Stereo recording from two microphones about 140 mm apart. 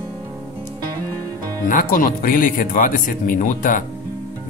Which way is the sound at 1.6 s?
80° left.